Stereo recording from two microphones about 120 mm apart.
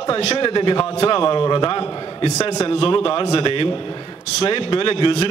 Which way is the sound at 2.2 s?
65° left (ahead or behind).